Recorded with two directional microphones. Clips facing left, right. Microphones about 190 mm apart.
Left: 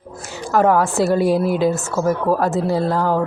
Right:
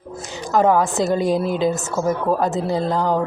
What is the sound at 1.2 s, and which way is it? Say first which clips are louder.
Speech: left 2 dB; 5° left (ahead or behind).